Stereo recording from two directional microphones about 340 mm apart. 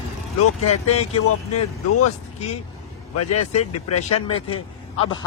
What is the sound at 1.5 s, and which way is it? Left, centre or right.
Speech, left.